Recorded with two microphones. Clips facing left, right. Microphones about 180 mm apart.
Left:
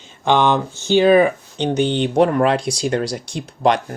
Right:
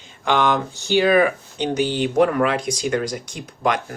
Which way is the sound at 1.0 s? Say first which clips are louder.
Left 4 dB; 25° left (ahead or behind).